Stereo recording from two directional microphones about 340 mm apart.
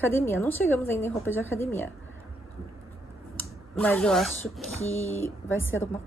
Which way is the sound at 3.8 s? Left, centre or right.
Centre.